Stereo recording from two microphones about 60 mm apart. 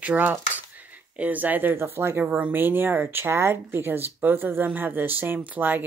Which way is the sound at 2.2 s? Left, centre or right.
Right.